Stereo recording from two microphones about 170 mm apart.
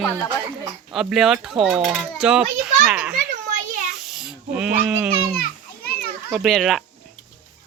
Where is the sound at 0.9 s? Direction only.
Centre (ahead or behind).